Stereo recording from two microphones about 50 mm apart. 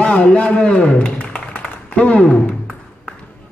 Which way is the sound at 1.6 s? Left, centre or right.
Left.